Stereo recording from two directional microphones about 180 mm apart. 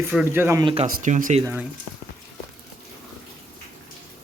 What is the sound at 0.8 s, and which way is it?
Speech, 45° right (ahead or behind).